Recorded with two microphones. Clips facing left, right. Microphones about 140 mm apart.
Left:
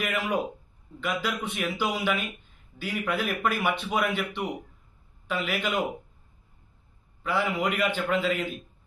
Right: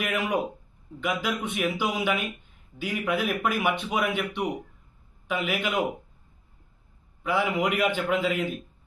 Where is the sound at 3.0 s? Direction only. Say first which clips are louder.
Right 1 dB; 5° right (ahead or behind).